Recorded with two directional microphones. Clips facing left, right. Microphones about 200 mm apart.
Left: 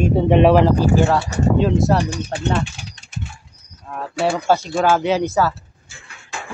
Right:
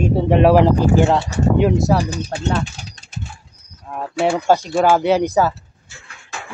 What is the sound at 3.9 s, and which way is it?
Speech, 15° right (ahead or behind).